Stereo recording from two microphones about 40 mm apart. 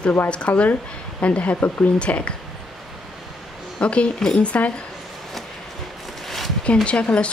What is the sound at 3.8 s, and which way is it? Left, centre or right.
Speech, left.